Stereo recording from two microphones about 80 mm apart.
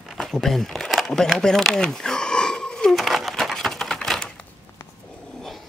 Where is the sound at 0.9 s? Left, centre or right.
Centre.